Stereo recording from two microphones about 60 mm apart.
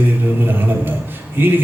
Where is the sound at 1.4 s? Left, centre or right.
Right.